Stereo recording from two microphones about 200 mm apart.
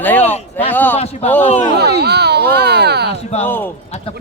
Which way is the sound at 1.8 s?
55° right (ahead or behind).